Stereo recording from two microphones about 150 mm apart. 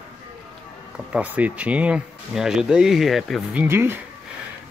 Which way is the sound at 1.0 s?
10° right (ahead or behind).